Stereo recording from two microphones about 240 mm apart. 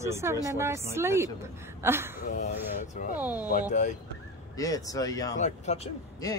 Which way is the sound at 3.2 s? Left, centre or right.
Centre.